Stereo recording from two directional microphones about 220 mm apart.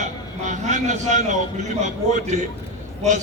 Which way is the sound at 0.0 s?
35° right (ahead or behind).